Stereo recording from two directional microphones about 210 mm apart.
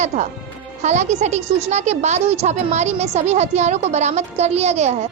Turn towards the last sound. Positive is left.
turn(degrees=-30)  # may be behind; listen again after turning